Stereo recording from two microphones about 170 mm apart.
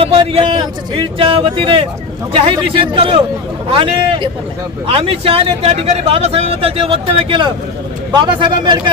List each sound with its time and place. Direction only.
0.0 s a man's voice: 35° right (ahead or behind)